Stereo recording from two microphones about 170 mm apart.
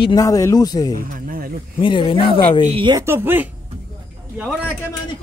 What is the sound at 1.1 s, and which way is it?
Snake, 55° right (ahead or behind).